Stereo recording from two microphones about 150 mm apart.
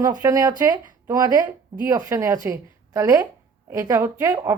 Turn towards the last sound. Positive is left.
turn(degrees=-20)  # may be behind; listen again after turning